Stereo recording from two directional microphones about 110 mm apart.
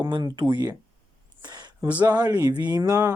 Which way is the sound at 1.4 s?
40° right (ahead or behind).